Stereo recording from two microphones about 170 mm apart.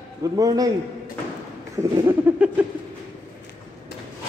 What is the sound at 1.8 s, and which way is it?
Speech, 15° right (ahead or behind).